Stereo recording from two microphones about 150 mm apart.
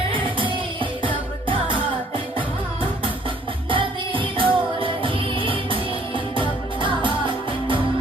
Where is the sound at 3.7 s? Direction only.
35° right (ahead or behind).